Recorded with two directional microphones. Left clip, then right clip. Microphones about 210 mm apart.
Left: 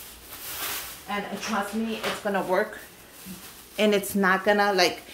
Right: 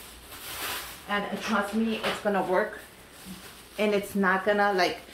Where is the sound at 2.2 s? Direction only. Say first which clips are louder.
Left 1 dB; 20° left (ahead or behind).